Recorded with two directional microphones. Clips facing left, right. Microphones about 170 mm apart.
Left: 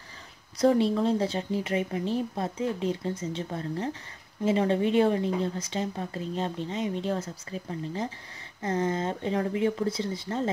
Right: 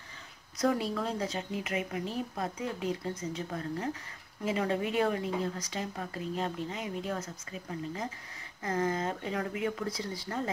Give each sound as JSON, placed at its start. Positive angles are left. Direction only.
{"t": 0.6, "sound": "speech", "side_deg": 30}